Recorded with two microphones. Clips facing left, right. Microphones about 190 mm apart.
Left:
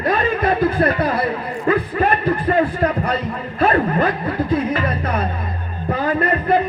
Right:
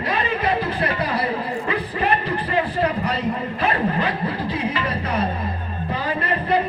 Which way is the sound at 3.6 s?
50° left (ahead or behind).